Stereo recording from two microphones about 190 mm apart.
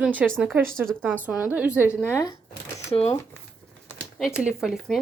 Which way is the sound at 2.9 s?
30° left (ahead or behind).